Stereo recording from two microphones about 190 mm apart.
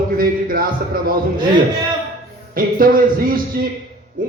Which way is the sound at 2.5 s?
50° right (ahead or behind).